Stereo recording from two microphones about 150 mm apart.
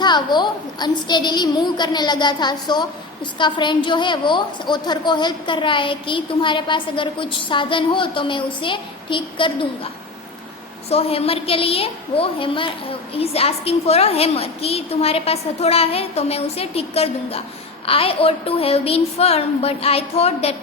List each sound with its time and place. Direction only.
0.0 s a woman's voice: 30° left (ahead or behind)